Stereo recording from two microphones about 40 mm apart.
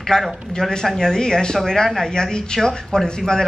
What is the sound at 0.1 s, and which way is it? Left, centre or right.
Speech, centre.